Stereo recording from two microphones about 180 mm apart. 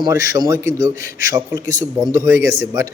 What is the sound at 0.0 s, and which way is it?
Speech, 20° right (ahead or behind).